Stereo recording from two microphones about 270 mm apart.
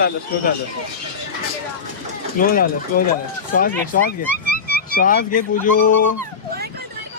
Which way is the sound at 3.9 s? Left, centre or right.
Left.